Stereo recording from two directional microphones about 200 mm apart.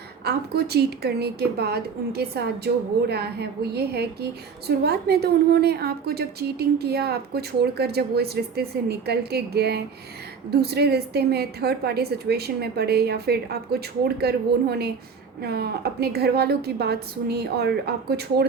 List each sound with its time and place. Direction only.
0.3 s a woman's voice: 55° right (ahead or behind)